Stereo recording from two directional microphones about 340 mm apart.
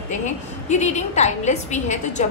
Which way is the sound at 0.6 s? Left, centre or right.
Left.